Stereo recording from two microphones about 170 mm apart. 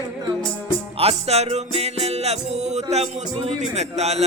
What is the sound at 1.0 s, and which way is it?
Music, 35° right (ahead or behind).